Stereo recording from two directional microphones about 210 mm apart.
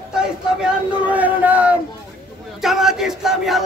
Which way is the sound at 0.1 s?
5° right (ahead or behind).